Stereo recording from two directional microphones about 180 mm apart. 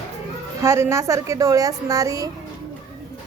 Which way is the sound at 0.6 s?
15° right (ahead or behind).